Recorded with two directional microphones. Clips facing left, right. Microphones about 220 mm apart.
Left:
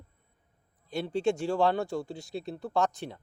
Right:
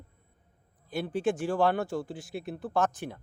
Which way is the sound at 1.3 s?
20° left (ahead or behind).